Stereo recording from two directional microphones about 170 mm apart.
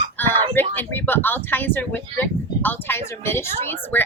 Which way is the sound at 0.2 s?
10° left (ahead or behind).